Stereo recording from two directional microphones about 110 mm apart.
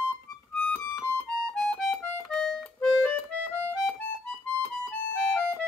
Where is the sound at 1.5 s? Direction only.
5° left (ahead or behind).